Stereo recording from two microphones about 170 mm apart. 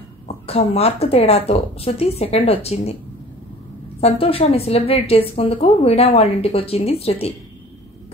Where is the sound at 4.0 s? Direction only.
35° left (ahead or behind).